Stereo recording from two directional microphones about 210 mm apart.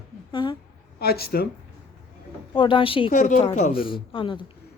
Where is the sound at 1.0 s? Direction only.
50° left (ahead or behind).